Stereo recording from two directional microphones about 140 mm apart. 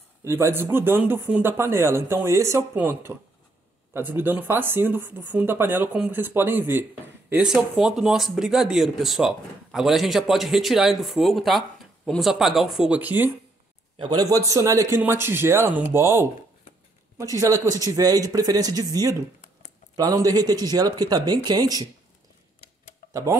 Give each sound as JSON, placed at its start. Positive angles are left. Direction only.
{"t": 0.2, "sound": "speech", "side_deg": -20}
{"t": 13.9, "sound": "a man's voice", "side_deg": -30}
{"t": 17.2, "sound": "a man's voice", "side_deg": -20}